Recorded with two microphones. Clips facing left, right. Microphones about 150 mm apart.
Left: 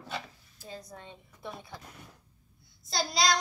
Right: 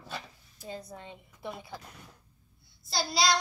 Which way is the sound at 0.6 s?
20° right (ahead or behind).